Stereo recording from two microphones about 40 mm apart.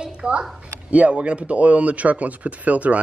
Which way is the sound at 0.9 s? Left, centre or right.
Right.